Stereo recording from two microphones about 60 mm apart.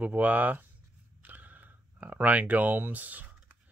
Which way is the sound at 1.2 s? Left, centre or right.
Right.